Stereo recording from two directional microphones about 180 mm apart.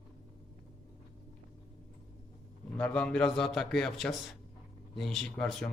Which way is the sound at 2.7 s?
5° left (ahead or behind).